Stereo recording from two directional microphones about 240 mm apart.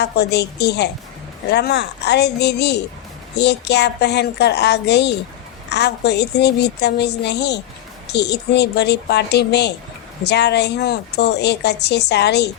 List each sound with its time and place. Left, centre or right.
0.0 s a woman's voice: left